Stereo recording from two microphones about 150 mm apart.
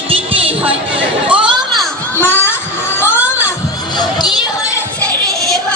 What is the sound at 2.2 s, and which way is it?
Children playing, 15° left (ahead or behind).